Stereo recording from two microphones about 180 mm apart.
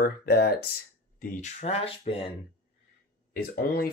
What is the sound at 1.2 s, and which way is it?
Speech, 40° left (ahead or behind).